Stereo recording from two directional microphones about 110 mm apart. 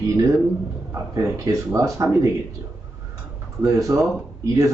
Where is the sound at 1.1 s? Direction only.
30° right (ahead or behind).